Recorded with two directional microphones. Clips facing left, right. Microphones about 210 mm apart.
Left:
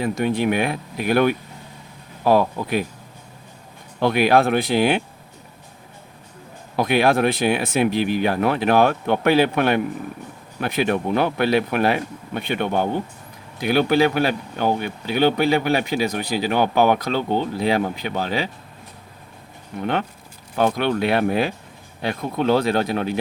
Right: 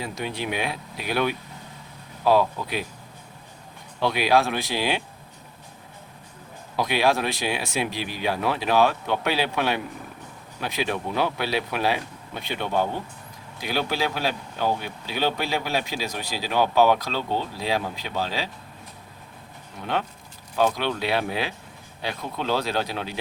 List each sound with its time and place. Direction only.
0.0 s speech: 50° left (ahead or behind)
4.0 s speech: 55° left (ahead or behind)
6.7 s speech: 55° left (ahead or behind)
19.8 s speech: 60° left (ahead or behind)